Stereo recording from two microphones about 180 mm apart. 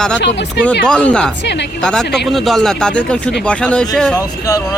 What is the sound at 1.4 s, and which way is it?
Speech, 75° left (ahead or behind).